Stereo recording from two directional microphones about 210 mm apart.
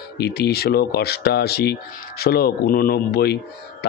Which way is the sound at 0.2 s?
50° left (ahead or behind).